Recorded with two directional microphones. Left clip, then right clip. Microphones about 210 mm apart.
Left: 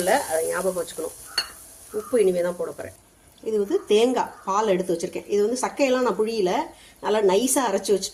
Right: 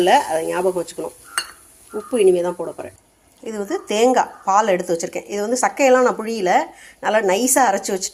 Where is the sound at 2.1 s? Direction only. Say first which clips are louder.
Right 5 dB; 20° right (ahead or behind).